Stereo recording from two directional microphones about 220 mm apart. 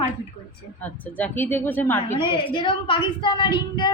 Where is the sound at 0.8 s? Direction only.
5° left (ahead or behind).